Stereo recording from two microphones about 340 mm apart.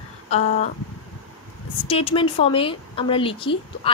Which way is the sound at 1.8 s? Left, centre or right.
Centre.